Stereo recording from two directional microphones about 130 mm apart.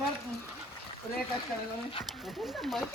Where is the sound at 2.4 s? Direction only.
Centre (ahead or behind).